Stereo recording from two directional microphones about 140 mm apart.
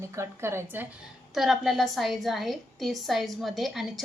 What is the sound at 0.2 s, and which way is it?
Speech, 15° right (ahead or behind).